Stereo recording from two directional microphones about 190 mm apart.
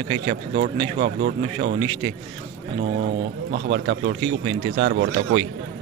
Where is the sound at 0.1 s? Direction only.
40° right (ahead or behind).